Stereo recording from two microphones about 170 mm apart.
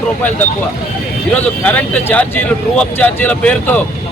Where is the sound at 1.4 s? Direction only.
10° left (ahead or behind).